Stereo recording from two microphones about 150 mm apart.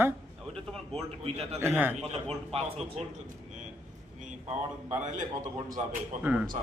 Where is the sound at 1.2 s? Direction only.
45° right (ahead or behind).